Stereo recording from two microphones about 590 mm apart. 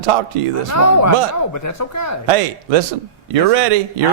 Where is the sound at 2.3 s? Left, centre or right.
Right.